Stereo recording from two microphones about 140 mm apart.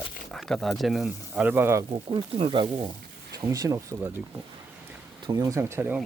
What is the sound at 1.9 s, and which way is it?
Speech, 35° right (ahead or behind).